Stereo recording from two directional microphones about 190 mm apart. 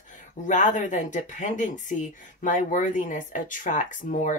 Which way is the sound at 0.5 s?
40° left (ahead or behind).